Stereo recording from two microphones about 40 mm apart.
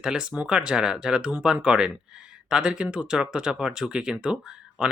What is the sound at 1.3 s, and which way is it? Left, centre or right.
Speech, right.